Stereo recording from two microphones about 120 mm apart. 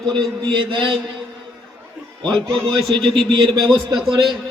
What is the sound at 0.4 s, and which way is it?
Speech, 40° right (ahead or behind).